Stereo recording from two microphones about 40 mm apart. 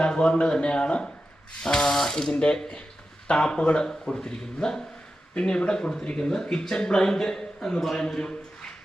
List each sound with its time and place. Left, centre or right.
0.0 s a man's voice: left
2.3 s a man's voice: left
5.3 s a man's voice: left